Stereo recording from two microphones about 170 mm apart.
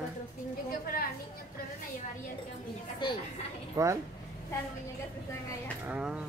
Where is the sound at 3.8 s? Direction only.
15° right (ahead or behind).